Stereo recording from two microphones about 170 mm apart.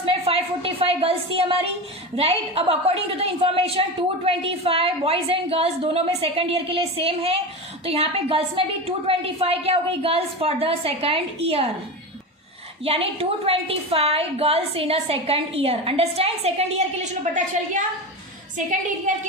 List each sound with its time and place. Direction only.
0.0 s a woman's voice: 35° right (ahead or behind)
12.8 s a woman's voice: 35° right (ahead or behind)
19.1 s a woman's voice: 45° right (ahead or behind)